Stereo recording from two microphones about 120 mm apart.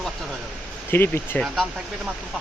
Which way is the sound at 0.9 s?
15° left (ahead or behind).